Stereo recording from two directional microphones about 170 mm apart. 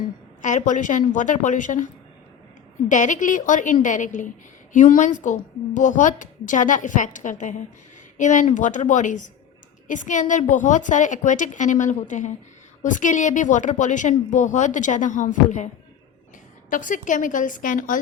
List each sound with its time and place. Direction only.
0.4 s a woman's voice: 45° left (ahead or behind)
2.9 s a woman's voice: 45° left (ahead or behind)